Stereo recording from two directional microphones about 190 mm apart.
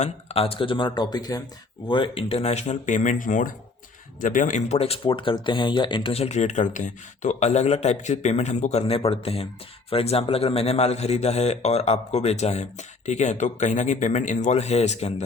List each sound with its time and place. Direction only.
0.0 s speech: 35° left (ahead or behind)